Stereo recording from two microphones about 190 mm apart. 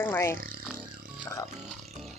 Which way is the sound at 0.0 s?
15° left (ahead or behind).